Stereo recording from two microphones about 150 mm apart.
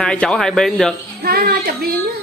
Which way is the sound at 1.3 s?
90° right.